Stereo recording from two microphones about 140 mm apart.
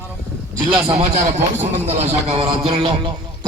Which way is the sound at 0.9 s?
50° right (ahead or behind).